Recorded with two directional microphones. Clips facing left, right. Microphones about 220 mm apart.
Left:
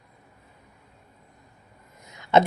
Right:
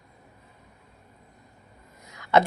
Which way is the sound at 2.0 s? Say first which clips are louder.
Left 2 dB; 20° left (ahead or behind).